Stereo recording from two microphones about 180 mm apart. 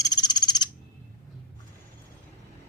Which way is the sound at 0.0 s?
20° left (ahead or behind).